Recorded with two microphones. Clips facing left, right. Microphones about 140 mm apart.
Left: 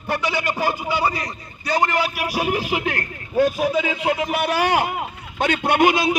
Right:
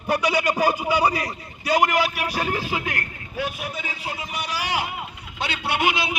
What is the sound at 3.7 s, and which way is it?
A man's voice, 80° left.